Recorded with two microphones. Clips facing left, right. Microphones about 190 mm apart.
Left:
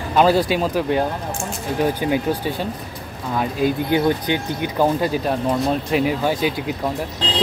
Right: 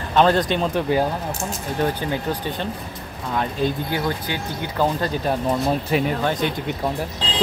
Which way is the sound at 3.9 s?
20° left (ahead or behind).